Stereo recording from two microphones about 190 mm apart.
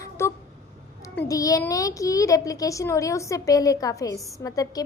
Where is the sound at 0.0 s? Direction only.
15° left (ahead or behind).